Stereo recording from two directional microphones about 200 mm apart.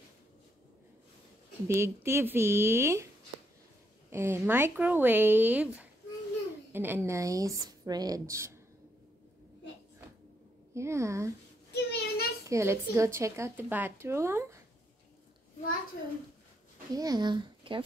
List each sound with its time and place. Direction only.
1.7 s a woman's voice: 15° right (ahead or behind)
4.1 s a woman's voice: 10° right (ahead or behind)
10.7 s a woman's voice: 15° right (ahead or behind)
11.7 s a sound: 55° left (ahead or behind)
12.4 s a woman's voice: 15° right (ahead or behind)
16.9 s speech: 20° right (ahead or behind)